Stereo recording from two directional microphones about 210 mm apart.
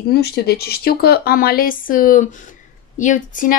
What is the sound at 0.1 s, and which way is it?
Speech, 50° left (ahead or behind).